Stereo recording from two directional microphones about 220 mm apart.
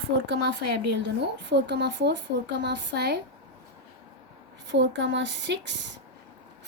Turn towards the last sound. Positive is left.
turn(degrees=-55)  # may be behind; listen again after turning